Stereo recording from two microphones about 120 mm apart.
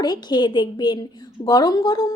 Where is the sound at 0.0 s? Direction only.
35° left (ahead or behind).